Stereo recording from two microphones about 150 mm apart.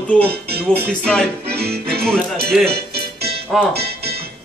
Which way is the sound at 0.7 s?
5° left (ahead or behind).